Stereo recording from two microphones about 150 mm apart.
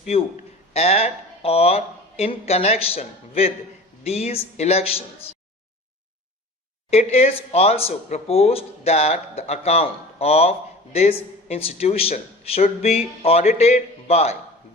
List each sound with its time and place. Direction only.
0.0 s a man's voice: 40° left (ahead or behind)
7.1 s speech: 40° left (ahead or behind)